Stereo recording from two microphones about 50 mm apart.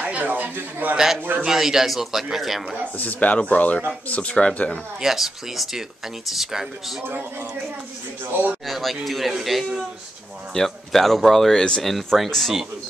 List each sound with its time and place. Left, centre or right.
0.0 s a sound: right
0.6 s a man's voice: right
0.9 s a man's voice: centre
3.0 s speech: left
5.0 s speech: centre
8.3 s a man's voice: right
8.6 s speech: centre